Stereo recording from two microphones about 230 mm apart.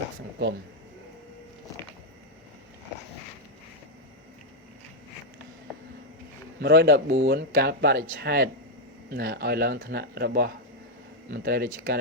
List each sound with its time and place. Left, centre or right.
6.6 s speech: right